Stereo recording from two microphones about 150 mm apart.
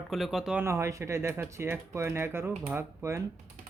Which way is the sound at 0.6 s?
20° right (ahead or behind).